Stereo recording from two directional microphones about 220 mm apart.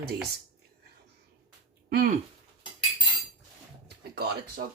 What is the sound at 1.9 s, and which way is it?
Speech, 40° right (ahead or behind).